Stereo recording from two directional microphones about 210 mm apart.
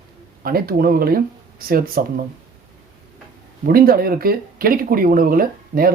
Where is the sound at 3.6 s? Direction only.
45° right (ahead or behind).